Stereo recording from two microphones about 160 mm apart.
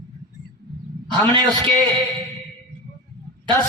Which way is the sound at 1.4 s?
5° left (ahead or behind).